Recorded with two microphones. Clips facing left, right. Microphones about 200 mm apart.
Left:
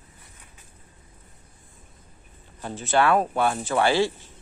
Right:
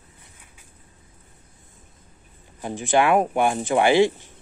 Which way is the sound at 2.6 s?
15° right (ahead or behind).